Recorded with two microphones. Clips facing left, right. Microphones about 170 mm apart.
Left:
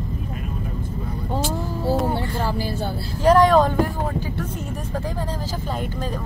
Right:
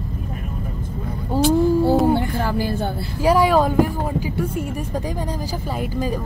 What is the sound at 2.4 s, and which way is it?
Speech, 55° right (ahead or behind).